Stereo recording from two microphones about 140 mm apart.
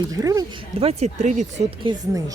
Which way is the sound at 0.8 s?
55° right (ahead or behind).